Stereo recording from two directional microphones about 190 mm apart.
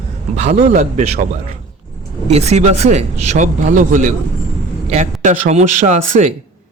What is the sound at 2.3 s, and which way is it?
Speech, 35° right (ahead or behind).